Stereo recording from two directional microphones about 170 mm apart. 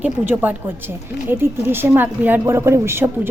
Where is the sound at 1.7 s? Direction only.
15° right (ahead or behind).